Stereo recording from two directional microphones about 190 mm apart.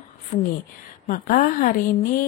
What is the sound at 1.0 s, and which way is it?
Speech, 45° left (ahead or behind).